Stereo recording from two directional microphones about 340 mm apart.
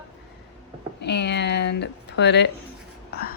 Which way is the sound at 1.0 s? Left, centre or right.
Left.